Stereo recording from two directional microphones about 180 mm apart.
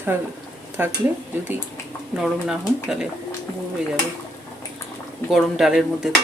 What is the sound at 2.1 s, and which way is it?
Speech, 5° right (ahead or behind).